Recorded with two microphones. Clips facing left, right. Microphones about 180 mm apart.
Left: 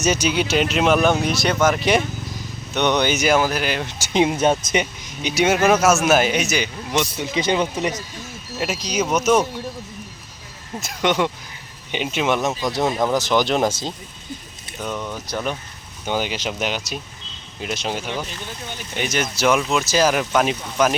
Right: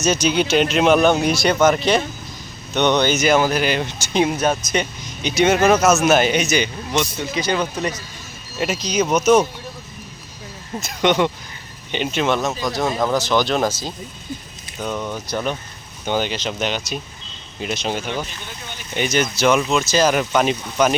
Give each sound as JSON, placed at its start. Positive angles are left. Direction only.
{"t": 0.0, "sound": "speech", "side_deg": 10}
{"t": 1.8, "sound": "speech", "side_deg": 15}
{"t": 4.0, "sound": "speech", "side_deg": 20}
{"t": 4.8, "sound": "speech", "side_deg": 10}
{"t": 8.5, "sound": "speech", "side_deg": 0}
{"t": 10.8, "sound": "speech", "side_deg": 5}
{"t": 12.4, "sound": "speech", "side_deg": 20}
{"t": 14.8, "sound": "speech", "side_deg": -5}
{"t": 15.3, "sound": "speech", "side_deg": 5}